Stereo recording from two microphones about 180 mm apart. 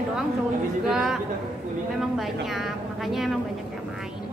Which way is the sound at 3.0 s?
Centre (ahead or behind).